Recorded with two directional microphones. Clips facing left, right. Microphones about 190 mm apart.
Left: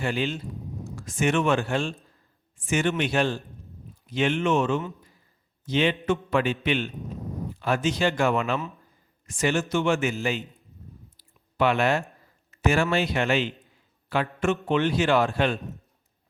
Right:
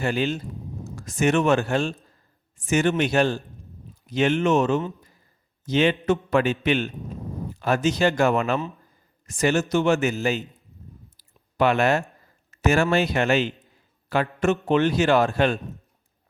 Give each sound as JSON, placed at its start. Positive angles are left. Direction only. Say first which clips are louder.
{"t": 0.0, "sound": "a man's voice", "louder": "right 3 dB", "side_deg": -45}
{"t": 11.2, "sound": "a sound", "louder": "right 2 dB", "side_deg": -40}
{"t": 12.5, "sound": "a man's voice", "louder": "right 3 dB", "side_deg": -45}